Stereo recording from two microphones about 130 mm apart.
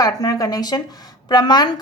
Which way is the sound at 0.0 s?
30° left (ahead or behind).